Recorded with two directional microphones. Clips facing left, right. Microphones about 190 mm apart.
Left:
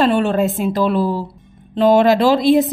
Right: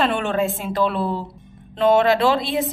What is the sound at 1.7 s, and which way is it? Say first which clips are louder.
Speech: left 4 dB; 35° left (ahead or behind).